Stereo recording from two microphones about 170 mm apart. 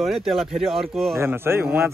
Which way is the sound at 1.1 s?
15° right (ahead or behind).